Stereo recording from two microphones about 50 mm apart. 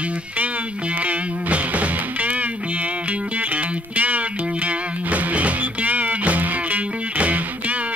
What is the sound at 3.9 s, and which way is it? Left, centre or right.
Music, right.